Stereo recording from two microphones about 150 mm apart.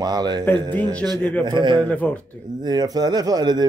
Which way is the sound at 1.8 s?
10° left (ahead or behind).